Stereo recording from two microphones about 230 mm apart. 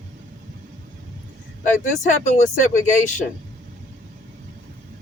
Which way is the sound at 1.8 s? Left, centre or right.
Left.